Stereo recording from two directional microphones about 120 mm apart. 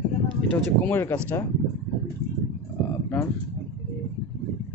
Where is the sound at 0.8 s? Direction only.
15° left (ahead or behind).